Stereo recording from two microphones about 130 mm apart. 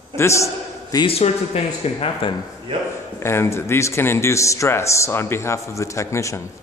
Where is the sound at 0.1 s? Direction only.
20° left (ahead or behind).